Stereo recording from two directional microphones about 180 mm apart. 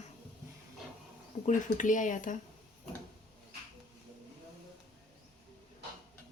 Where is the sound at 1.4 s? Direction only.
45° left (ahead or behind).